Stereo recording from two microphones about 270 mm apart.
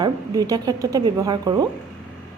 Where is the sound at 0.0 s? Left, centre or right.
Centre.